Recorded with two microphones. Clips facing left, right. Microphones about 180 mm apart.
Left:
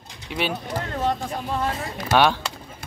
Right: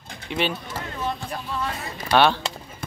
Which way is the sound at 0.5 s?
45° left (ahead or behind).